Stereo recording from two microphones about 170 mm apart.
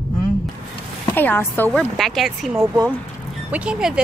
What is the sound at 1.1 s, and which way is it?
Speech, 10° left (ahead or behind).